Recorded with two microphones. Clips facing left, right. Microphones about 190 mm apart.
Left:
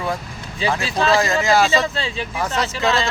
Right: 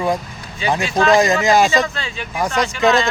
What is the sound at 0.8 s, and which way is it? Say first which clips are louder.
Speech: right 5 dB; 35° left (ahead or behind).